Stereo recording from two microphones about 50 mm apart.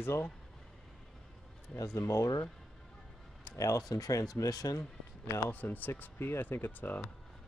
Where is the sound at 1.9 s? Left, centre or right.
Left.